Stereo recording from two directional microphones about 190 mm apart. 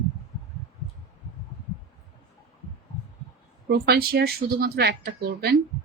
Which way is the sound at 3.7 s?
55° right (ahead or behind).